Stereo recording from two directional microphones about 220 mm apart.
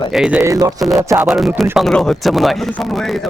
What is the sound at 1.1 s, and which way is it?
Speech, centre (ahead or behind).